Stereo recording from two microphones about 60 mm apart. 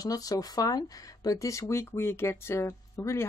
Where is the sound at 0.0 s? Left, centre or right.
Left.